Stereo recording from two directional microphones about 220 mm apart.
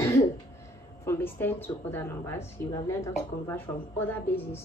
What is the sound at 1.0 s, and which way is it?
A woman's voice, 10° left (ahead or behind).